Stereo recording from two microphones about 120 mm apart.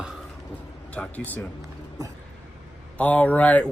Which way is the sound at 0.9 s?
15° left (ahead or behind).